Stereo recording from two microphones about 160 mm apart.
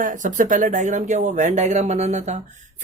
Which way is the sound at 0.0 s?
55° right (ahead or behind).